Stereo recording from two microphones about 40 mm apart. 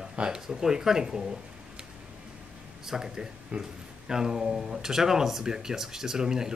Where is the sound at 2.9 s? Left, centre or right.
Centre.